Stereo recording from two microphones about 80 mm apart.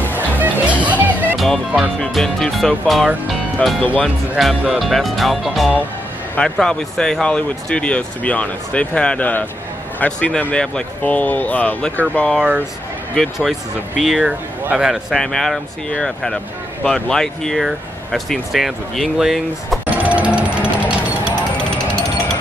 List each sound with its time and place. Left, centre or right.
0.1 s music: right
1.4 s speech: centre
2.0 s speech: centre
3.8 s speech: centre
4.4 s speech: centre
6.3 s speech: centre
13.1 s speech: centre
15.1 s speech: centre
20.0 s music: centre